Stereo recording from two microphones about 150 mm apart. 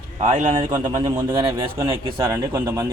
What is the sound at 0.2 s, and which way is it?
Speech, 55° right (ahead or behind).